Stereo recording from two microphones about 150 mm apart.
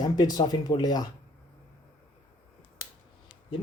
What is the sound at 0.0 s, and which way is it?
Speech, 25° left (ahead or behind).